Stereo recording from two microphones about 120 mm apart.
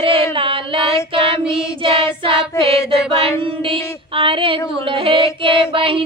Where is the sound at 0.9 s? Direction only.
25° left (ahead or behind).